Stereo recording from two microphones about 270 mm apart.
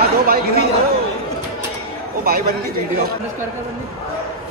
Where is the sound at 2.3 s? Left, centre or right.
Right.